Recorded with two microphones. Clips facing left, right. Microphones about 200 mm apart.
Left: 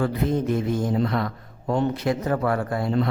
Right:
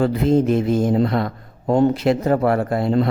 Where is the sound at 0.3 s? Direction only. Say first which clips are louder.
Right 8 dB; 90° right.